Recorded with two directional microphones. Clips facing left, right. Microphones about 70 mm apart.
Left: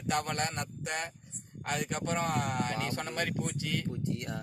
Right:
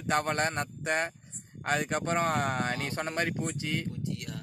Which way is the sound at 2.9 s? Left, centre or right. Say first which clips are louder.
Right 3 dB; right.